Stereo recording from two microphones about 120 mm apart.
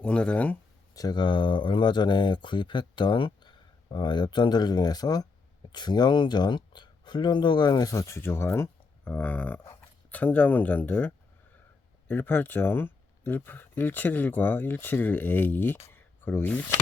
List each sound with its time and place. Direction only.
0.0 s speech: 10° left (ahead or behind)
0.9 s speech: 35° left (ahead or behind); by 15.8 s 15° left (ahead or behind)
15.9 s a sound: 15° left (ahead or behind)